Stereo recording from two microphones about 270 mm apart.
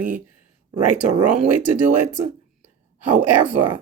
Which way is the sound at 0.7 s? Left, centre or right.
Right.